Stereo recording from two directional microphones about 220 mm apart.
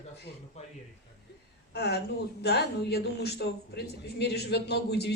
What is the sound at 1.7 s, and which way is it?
A woman's voice, 50° left (ahead or behind).